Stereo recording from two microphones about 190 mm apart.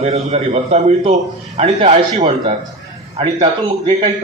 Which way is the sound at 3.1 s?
30° right (ahead or behind).